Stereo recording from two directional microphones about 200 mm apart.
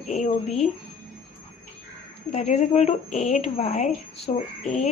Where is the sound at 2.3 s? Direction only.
35° left (ahead or behind).